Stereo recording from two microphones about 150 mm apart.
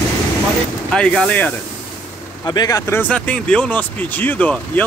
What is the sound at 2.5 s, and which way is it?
Speech, 25° left (ahead or behind).